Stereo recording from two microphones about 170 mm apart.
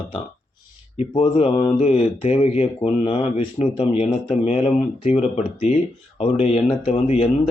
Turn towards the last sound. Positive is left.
turn(degrees=35)  # may be behind; listen again after turning